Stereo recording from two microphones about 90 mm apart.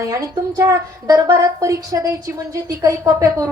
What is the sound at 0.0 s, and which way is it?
A woman's voice, 40° right (ahead or behind).